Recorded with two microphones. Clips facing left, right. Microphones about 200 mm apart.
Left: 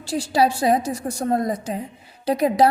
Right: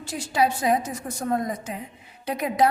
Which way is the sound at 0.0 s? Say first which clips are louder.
Left 4 dB; 30° left (ahead or behind).